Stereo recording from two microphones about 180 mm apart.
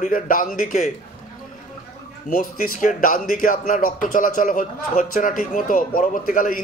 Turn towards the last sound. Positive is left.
turn(degrees=50)  # may be behind; listen again after turning